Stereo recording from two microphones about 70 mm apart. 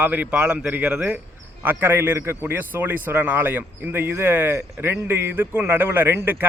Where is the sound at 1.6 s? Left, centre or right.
Right.